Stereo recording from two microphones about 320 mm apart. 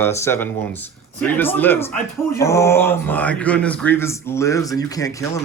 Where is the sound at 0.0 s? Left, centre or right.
Centre.